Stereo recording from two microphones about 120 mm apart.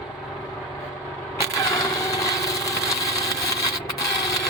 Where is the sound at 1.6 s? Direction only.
25° left (ahead or behind).